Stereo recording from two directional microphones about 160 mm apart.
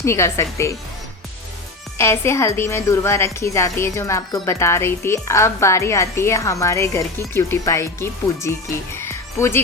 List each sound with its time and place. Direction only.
0.0 s a woman's voice: 15° left (ahead or behind)
2.0 s a woman's voice: 15° left (ahead or behind)
9.0 s music: 15° left (ahead or behind)